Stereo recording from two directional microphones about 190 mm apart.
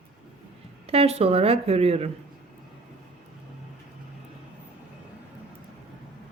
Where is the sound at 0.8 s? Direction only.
30° right (ahead or behind).